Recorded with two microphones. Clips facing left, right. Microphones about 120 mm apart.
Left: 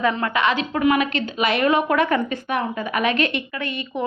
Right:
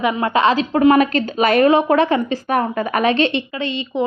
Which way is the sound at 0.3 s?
35° right (ahead or behind).